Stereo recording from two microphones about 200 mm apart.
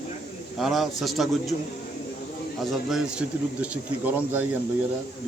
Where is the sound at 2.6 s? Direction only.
Centre (ahead or behind).